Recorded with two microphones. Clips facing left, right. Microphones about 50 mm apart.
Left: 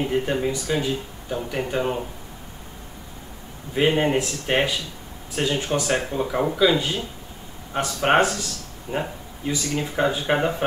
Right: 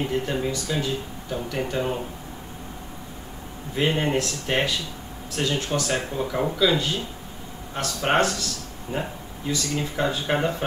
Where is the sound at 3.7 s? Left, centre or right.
Centre.